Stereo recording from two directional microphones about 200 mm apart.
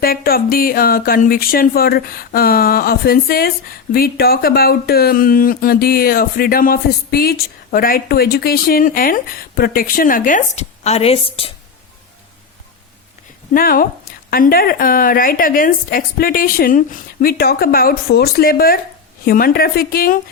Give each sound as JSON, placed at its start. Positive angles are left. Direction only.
{"t": 0.0, "sound": "speech", "side_deg": 50}
{"t": 13.5, "sound": "speech", "side_deg": 45}